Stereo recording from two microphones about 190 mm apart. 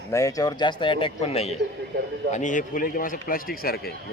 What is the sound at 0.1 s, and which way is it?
A man's voice, 15° left (ahead or behind).